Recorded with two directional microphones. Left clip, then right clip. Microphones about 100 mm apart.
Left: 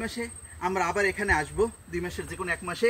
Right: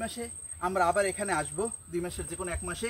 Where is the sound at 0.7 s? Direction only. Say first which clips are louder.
Even; 25° right (ahead or behind).